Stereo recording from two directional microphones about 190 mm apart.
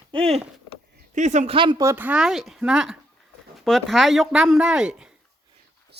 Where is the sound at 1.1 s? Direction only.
40° right (ahead or behind).